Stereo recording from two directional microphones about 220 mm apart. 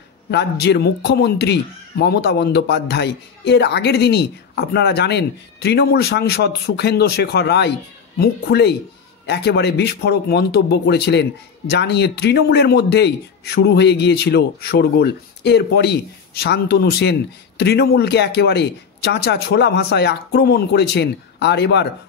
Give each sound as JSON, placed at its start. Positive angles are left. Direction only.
{"t": 0.3, "sound": "speech", "side_deg": 50}